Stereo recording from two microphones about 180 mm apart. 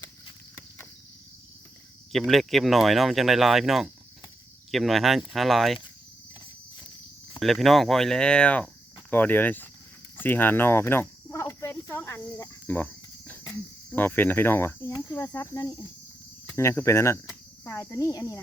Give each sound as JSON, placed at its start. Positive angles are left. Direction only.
{"t": 2.1, "sound": "speech", "side_deg": 0}
{"t": 7.3, "sound": "speech", "side_deg": 0}
{"t": 10.2, "sound": "cricket", "side_deg": 10}
{"t": 13.9, "sound": "speech", "side_deg": 10}
{"t": 14.8, "sound": "speech", "side_deg": 25}